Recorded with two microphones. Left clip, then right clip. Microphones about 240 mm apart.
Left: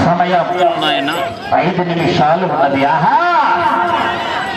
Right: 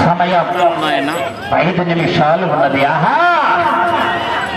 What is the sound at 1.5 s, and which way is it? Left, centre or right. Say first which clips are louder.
A man's voice: even; right.